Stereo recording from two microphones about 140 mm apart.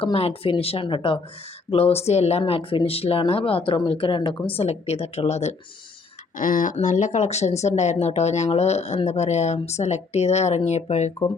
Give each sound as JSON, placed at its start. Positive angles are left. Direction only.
{"t": 0.0, "sound": "speech", "side_deg": 40}
{"t": 6.3, "sound": "speech", "side_deg": 70}